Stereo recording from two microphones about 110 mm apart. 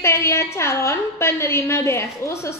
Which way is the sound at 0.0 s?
25° left (ahead or behind).